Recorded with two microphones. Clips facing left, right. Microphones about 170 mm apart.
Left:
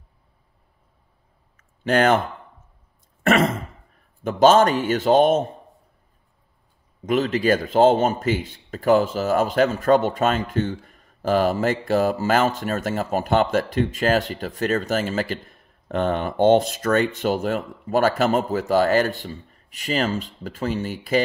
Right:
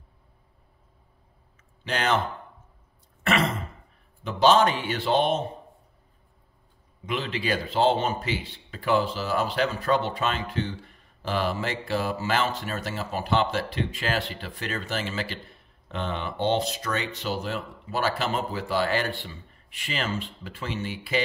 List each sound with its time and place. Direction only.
1.6 s a sound: 50° left (ahead or behind)
3.3 s throat clearing: 45° left (ahead or behind)
4.2 s speech: 45° left (ahead or behind)
7.1 s speech: 45° left (ahead or behind)